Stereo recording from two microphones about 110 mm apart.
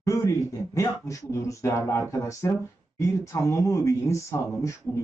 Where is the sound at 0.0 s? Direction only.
30° left (ahead or behind).